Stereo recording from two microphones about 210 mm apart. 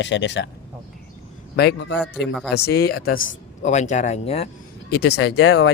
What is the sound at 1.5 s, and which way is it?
Speech, 50° left (ahead or behind).